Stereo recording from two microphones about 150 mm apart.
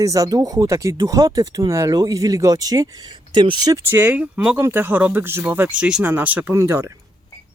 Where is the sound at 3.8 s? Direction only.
10° right (ahead or behind).